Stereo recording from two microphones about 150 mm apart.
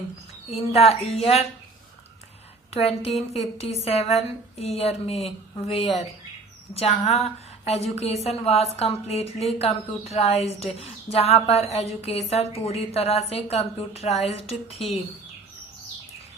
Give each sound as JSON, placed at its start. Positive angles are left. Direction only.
{"t": 0.5, "sound": "a woman's voice", "side_deg": 40}
{"t": 2.6, "sound": "a woman's voice", "side_deg": 45}